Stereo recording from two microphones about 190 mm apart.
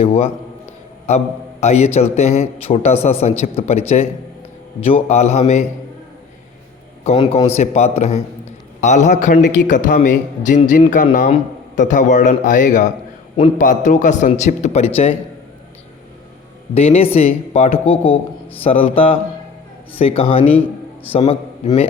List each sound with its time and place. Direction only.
0.0 s a man's voice: 35° left (ahead or behind)
1.6 s a man's voice: 35° left (ahead or behind)
7.0 s a man's voice: 30° left (ahead or behind)
16.7 s a man's voice: 35° left (ahead or behind)